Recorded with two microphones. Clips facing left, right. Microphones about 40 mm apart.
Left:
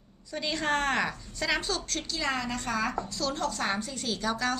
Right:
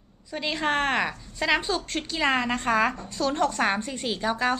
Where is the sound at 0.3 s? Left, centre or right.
Right.